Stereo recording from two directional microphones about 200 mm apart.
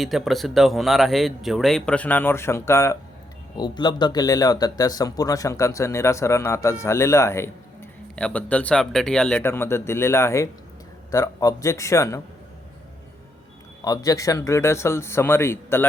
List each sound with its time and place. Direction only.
0.0 s speech: centre (ahead or behind)
13.8 s speech: 20° left (ahead or behind)